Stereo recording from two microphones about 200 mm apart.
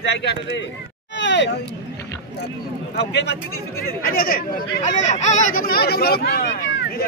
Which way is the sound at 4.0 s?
50° left (ahead or behind).